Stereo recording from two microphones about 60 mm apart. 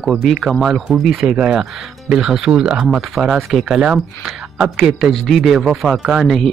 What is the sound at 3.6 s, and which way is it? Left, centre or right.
Speech, centre.